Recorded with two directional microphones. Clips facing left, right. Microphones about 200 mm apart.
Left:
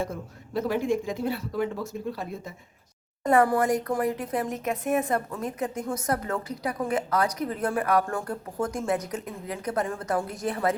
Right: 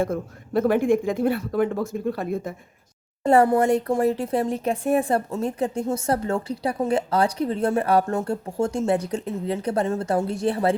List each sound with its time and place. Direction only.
0.0 s speech: 55° right (ahead or behind)
3.2 s speech: 25° right (ahead or behind)